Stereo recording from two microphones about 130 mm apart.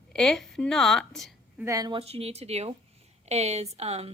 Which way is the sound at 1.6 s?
25° right (ahead or behind).